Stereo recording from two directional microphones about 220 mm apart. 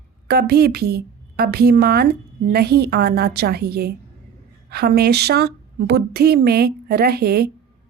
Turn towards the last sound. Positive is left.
turn(degrees=-45)  # may be behind; listen again after turning